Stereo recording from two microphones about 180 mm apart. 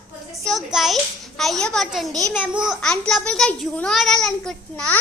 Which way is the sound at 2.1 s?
20° right (ahead or behind).